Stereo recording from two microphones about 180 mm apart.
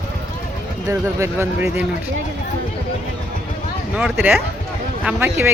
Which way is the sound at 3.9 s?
10° right (ahead or behind).